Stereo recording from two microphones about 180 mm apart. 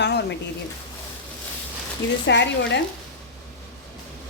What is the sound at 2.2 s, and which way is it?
Speech, 75° left (ahead or behind).